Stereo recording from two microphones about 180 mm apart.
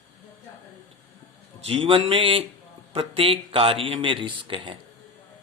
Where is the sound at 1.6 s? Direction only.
30° right (ahead or behind).